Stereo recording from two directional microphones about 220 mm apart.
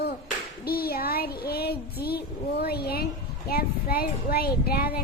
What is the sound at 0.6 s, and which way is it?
Child singing, 45° left (ahead or behind).